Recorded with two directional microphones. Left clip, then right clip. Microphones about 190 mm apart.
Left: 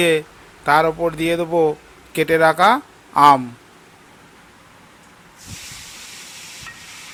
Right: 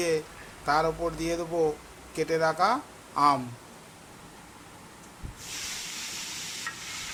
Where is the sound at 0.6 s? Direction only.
30° left (ahead or behind).